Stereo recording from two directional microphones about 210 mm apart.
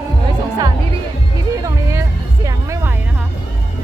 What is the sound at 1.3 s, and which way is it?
Music, 15° right (ahead or behind).